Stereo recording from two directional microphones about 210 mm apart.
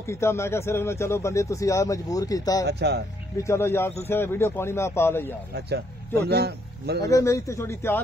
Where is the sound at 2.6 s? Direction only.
50° right (ahead or behind).